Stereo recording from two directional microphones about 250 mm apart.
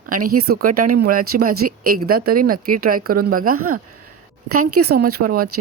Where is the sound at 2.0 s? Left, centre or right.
Right.